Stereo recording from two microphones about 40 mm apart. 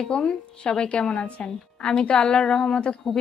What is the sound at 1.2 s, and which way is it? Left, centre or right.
A woman's voice, left.